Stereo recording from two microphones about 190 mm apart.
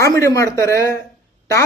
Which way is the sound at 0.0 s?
15° left (ahead or behind).